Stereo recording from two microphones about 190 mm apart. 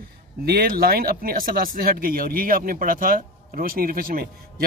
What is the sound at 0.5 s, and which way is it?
Speech, 50° right (ahead or behind).